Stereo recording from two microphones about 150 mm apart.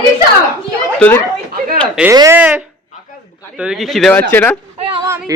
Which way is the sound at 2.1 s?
20° right (ahead or behind).